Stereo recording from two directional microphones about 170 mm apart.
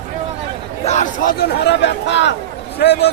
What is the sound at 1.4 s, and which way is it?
Speech, 90° left.